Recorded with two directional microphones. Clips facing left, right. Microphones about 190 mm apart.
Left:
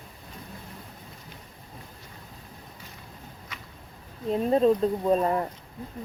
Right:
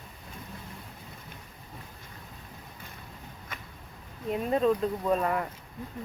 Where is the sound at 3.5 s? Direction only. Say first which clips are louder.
Right 3 dB; 50° right (ahead or behind).